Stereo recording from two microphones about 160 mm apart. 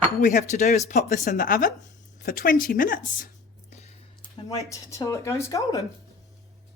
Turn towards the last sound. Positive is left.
turn(degrees=20)  # may be behind; listen again after turning